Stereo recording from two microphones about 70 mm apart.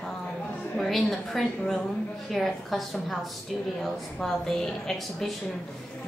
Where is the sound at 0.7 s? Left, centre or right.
Centre.